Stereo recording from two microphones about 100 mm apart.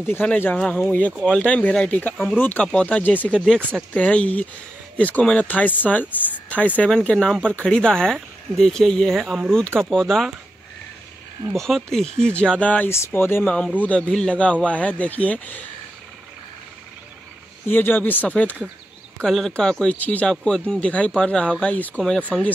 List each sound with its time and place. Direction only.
0.0 s speech: 20° left (ahead or behind)
11.5 s speech: 5° left (ahead or behind)
17.6 s speech: 20° left (ahead or behind)
19.2 s speech: centre (ahead or behind)